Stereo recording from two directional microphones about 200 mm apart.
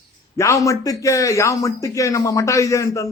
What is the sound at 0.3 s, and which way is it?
Speech, 15° left (ahead or behind).